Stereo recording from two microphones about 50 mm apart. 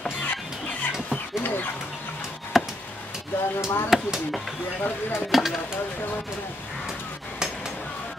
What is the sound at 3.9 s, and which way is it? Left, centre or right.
Speech, centre.